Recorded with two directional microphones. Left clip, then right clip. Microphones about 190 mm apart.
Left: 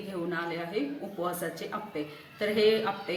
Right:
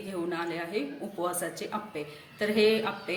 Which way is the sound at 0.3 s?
25° right (ahead or behind).